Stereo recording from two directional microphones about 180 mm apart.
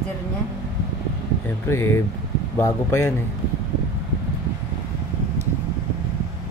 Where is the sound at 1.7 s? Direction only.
15° left (ahead or behind).